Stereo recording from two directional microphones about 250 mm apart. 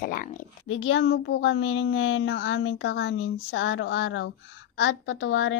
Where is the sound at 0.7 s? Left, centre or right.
Left.